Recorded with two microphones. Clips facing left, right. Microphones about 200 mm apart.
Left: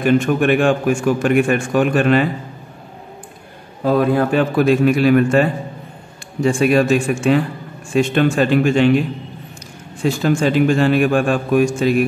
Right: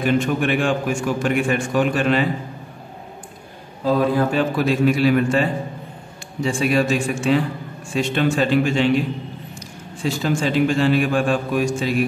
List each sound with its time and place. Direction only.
0.0 s a man's voice: 50° left (ahead or behind)
3.8 s a man's voice: 55° left (ahead or behind)
10.0 s a man's voice: 50° left (ahead or behind)